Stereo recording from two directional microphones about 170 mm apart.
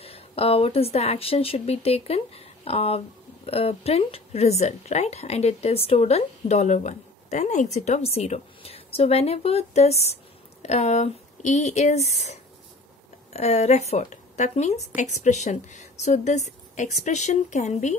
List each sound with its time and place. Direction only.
0.0 s a woman's voice: 35° left (ahead or behind)